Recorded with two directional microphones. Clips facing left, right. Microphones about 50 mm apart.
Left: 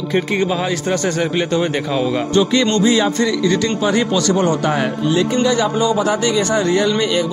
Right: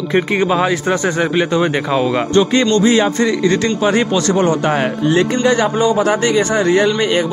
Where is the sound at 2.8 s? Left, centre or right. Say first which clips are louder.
Right 2 dB; right.